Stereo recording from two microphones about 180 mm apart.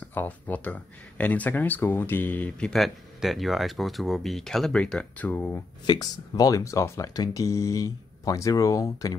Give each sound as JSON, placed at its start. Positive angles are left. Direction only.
{"t": 0.0, "sound": "speech", "side_deg": 10}
{"t": 5.9, "sound": "speech", "side_deg": 20}